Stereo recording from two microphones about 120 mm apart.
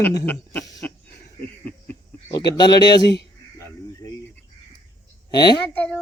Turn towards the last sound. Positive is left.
turn(degrees=10)  # may be behind; listen again after turning